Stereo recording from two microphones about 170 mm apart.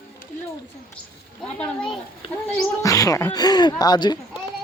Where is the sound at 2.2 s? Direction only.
35° left (ahead or behind).